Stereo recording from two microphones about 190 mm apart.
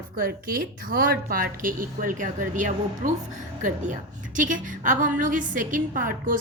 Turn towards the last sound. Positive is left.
turn(degrees=-45)  # may be behind; listen again after turning